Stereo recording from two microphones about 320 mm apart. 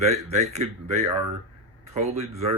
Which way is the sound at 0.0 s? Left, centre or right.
Right.